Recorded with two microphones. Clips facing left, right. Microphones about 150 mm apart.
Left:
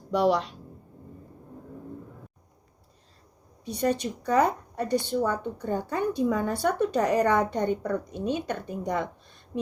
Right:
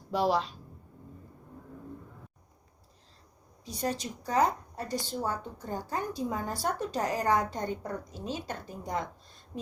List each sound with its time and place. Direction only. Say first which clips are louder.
0.1 s speech: left 4 dB; 75° left (ahead or behind)
3.7 s a woman's voice: left 7 dB; 65° left (ahead or behind)